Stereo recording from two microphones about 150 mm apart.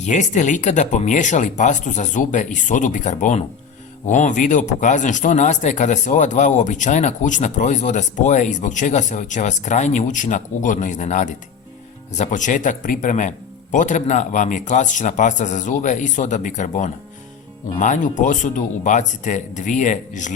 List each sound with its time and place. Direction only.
0.0 s speech: 55° left (ahead or behind)